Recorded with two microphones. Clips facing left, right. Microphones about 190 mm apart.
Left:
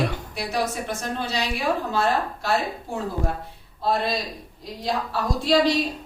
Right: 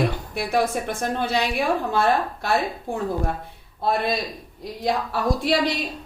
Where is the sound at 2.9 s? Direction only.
55° right (ahead or behind).